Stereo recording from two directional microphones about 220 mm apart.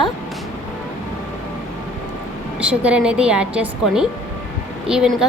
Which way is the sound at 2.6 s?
5° right (ahead or behind).